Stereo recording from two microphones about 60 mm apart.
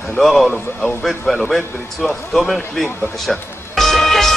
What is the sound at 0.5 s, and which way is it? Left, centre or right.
Speech, left.